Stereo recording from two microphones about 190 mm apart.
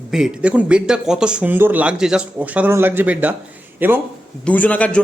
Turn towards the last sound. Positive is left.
turn(degrees=5)  # may be behind; listen again after turning